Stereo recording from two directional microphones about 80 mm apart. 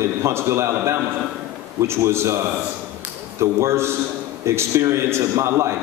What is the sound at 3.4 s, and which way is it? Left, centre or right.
A man's voice, right.